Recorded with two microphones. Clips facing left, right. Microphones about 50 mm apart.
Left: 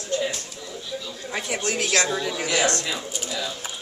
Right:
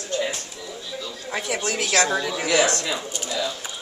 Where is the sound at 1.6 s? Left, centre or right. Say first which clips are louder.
Right 1 dB; right.